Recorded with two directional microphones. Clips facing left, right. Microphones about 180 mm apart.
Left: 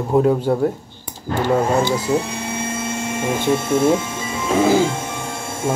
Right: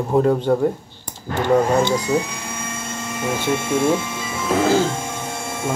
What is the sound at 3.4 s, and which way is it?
Speech, 10° left (ahead or behind).